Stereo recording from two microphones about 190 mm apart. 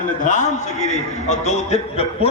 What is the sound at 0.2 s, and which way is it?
A man's voice, 40° left (ahead or behind).